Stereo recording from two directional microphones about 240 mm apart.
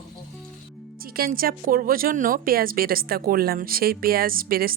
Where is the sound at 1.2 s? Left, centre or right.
Right.